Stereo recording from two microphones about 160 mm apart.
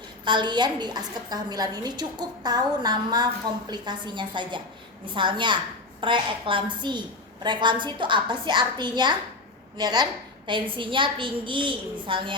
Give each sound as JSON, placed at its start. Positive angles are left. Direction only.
{"t": 0.3, "sound": "a woman's voice", "side_deg": -30}